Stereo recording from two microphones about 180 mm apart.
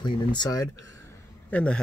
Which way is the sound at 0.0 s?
25° left (ahead or behind).